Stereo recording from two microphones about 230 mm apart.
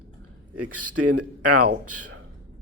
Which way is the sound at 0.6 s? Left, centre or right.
Right.